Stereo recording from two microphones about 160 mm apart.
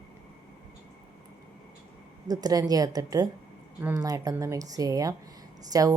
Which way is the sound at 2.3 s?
25° right (ahead or behind).